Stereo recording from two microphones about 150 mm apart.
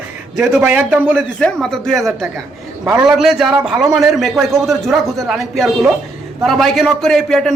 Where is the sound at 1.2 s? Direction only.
5° left (ahead or behind).